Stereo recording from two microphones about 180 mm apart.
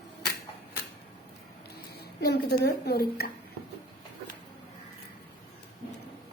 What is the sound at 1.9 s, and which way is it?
A woman's voice, 65° left (ahead or behind).